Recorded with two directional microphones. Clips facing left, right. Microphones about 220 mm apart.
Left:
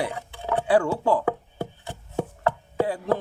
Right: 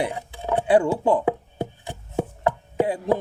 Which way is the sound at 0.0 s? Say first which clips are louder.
Right 2 dB; 20° right (ahead or behind).